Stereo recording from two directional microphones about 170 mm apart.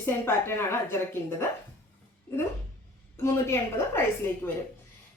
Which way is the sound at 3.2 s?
15° left (ahead or behind).